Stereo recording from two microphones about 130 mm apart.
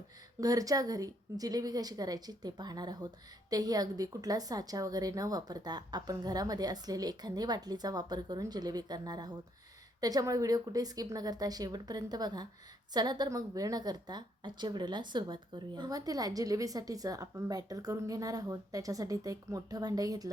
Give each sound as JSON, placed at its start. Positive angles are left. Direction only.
{"t": 0.3, "sound": "a woman's voice", "side_deg": -25}